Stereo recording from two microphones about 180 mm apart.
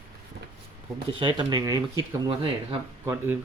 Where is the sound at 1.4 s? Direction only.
20° right (ahead or behind).